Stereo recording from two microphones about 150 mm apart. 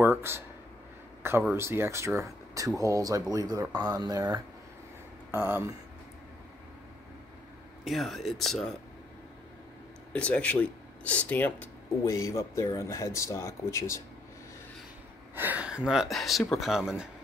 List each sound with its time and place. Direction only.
0.0 s a sound: 15° right (ahead or behind)
1.4 s speech: 15° right (ahead or behind)
7.8 s speech: centre (ahead or behind)
10.1 s speech: 10° left (ahead or behind)
15.3 s speech: 10° right (ahead or behind)